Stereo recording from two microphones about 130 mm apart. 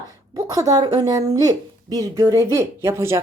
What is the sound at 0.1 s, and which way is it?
Speech, 25° right (ahead or behind).